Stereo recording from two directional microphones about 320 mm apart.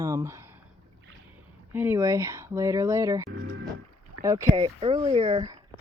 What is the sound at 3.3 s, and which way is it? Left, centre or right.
Speech, right.